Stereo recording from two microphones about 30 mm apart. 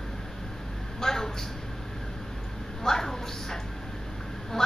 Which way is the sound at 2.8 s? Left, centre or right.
Centre.